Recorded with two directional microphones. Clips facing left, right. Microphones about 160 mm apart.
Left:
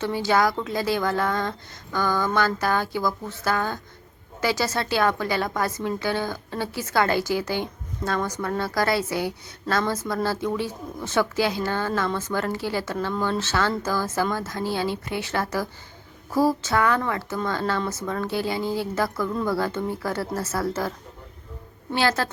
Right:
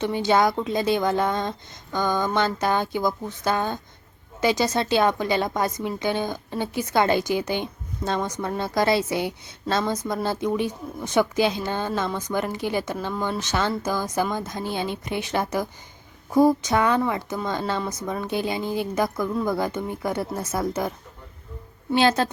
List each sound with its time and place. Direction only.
0.0 s a woman's voice: 20° right (ahead or behind)
21.9 s a woman's voice: 20° right (ahead or behind)